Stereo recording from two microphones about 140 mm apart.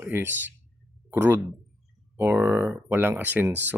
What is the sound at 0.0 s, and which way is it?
Speech, 15° right (ahead or behind).